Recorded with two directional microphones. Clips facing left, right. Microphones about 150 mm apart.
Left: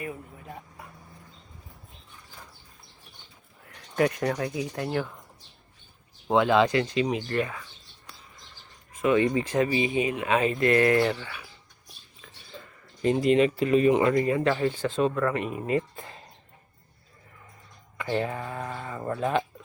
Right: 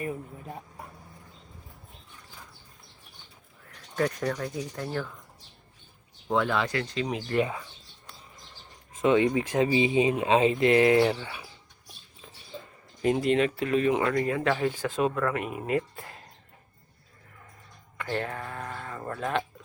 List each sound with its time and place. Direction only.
3.9 s speech: 65° left (ahead or behind)
6.2 s speech: 20° left (ahead or behind)
7.3 s speech: 15° right (ahead or behind)
9.0 s speech: 20° right (ahead or behind)
13.0 s speech: 5° right (ahead or behind)
17.9 s speech: 5° left (ahead or behind)